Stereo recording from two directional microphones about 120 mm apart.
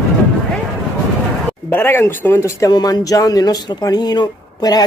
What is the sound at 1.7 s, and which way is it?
Speech, 20° left (ahead or behind).